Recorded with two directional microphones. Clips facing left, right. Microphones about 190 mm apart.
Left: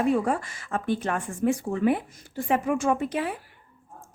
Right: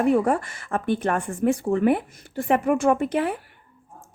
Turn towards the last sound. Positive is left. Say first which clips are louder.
# right 4 dB
turn(degrees=-55)  # may be behind; listen again after turning